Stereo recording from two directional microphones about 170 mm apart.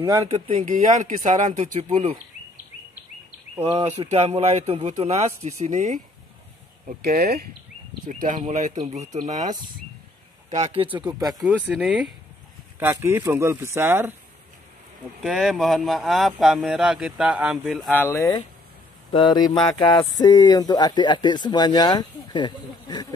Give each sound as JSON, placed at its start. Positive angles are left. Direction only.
{"t": 0.0, "sound": "speech", "side_deg": -20}
{"t": 0.3, "sound": "a man's voice", "side_deg": -40}
{"t": 3.6, "sound": "a man's voice", "side_deg": -35}
{"t": 7.0, "sound": "speech", "side_deg": -65}
{"t": 8.1, "sound": "a man's voice", "side_deg": -50}
{"t": 11.0, "sound": "speech", "side_deg": -20}
{"t": 11.3, "sound": "speech", "side_deg": 0}
{"t": 15.2, "sound": "speech", "side_deg": 0}
{"t": 18.0, "sound": "speech", "side_deg": 15}